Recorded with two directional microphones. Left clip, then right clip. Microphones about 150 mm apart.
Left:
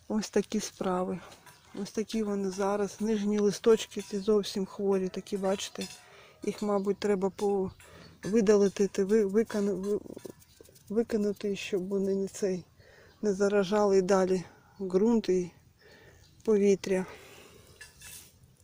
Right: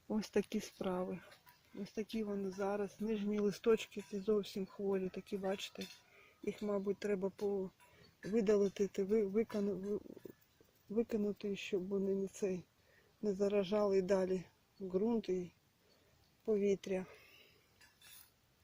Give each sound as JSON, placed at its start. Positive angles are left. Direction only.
{"t": 0.1, "sound": "speech", "side_deg": -10}
{"t": 9.4, "sound": "speech", "side_deg": -10}
{"t": 13.2, "sound": "speech", "side_deg": -5}
{"t": 16.5, "sound": "speech", "side_deg": 20}